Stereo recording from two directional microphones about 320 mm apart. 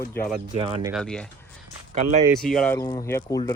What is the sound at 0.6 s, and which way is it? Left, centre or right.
Speech, centre.